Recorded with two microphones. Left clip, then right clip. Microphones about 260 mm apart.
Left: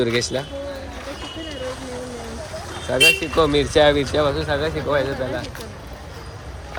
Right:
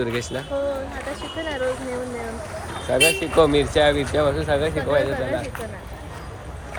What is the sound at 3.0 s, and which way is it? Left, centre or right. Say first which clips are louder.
Speech: left 2 dB; centre.